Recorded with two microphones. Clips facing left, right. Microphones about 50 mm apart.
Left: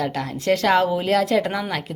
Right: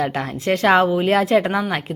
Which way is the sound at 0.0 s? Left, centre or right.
Right.